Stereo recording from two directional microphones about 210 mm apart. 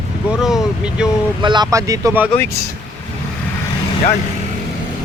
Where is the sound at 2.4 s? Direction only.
15° left (ahead or behind).